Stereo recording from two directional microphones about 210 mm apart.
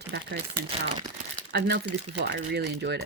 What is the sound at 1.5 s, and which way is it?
Speech, 50° right (ahead or behind).